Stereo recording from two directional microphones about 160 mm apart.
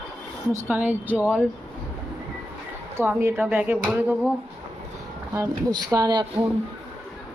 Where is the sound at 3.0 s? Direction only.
15° right (ahead or behind).